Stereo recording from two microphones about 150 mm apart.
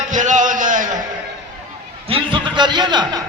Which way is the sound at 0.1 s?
55° right (ahead or behind).